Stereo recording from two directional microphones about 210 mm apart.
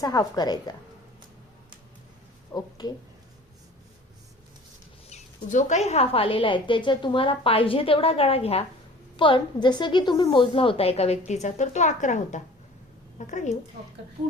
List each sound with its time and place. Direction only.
0.0 s speech: 20° left (ahead or behind)
2.5 s speech: 20° left (ahead or behind)
5.0 s a woman's voice: 35° left (ahead or behind)